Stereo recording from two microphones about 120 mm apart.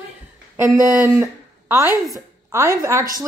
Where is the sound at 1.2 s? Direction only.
15° right (ahead or behind).